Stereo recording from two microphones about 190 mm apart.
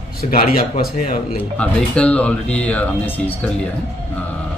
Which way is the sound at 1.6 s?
5° left (ahead or behind).